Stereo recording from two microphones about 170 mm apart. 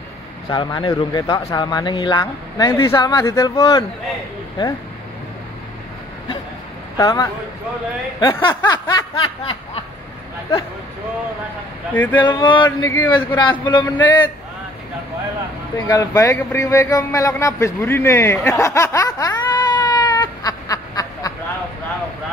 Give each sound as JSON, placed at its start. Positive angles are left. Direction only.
{"t": 0.5, "sound": "speech", "side_deg": 25}
{"t": 7.0, "sound": "speech", "side_deg": 25}
{"t": 8.4, "sound": "speech", "side_deg": 25}
{"t": 11.9, "sound": "a man's voice", "side_deg": 10}
{"t": 12.2, "sound": "speech", "side_deg": 25}
{"t": 13.4, "sound": "speech", "side_deg": 25}
{"t": 13.9, "sound": "a man's voice", "side_deg": 10}
{"t": 15.9, "sound": "speech", "side_deg": 20}